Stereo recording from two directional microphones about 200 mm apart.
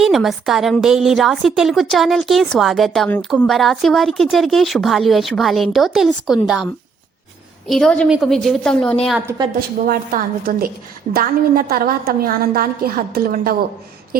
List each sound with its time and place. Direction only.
0.0 s a woman's voice: centre (ahead or behind)
7.7 s a woman's voice: 5° left (ahead or behind)
9.6 s a woman's voice: 45° right (ahead or behind)